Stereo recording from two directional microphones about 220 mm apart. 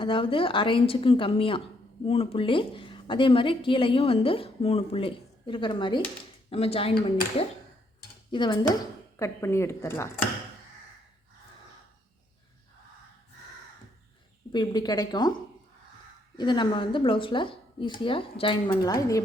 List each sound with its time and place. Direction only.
0.0 s a woman's voice: 25° left (ahead or behind)
8.3 s speech: 20° left (ahead or behind)
14.5 s speech: 20° left (ahead or behind)
16.4 s a woman's voice: 20° left (ahead or behind)